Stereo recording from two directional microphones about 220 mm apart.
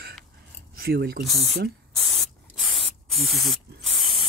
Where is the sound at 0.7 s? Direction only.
45° right (ahead or behind).